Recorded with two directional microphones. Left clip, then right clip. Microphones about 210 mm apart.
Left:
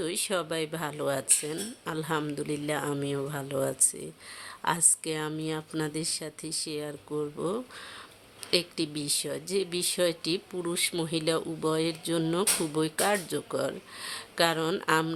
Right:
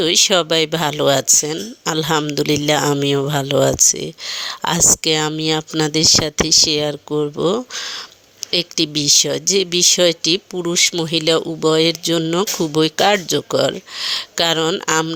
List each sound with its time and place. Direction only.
0.0 s speech: 35° right (ahead or behind)